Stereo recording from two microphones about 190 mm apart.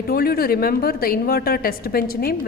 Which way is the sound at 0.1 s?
50° left (ahead or behind).